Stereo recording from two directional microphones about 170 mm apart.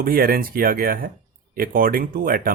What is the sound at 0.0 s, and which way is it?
Speech, 60° right (ahead or behind).